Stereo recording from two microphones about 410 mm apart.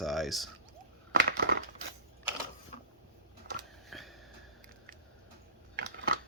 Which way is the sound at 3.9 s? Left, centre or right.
Centre.